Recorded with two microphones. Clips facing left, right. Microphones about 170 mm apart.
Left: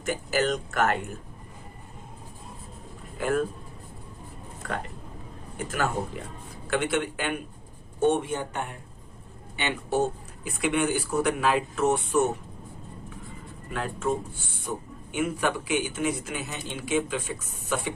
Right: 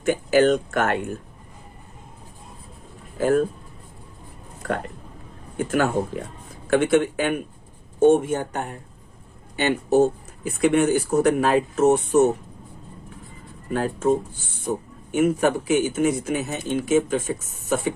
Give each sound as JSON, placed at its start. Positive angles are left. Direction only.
{"t": 0.1, "sound": "speech", "side_deg": -55}
{"t": 3.2, "sound": "speech", "side_deg": -40}
{"t": 5.5, "sound": "speech", "side_deg": -50}
{"t": 13.7, "sound": "speech", "side_deg": -40}